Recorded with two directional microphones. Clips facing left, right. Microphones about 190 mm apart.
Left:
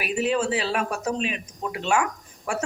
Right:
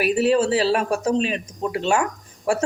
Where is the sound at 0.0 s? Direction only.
40° right (ahead or behind).